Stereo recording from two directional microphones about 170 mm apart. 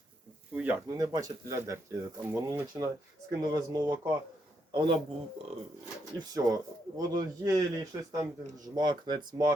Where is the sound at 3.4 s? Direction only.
25° right (ahead or behind).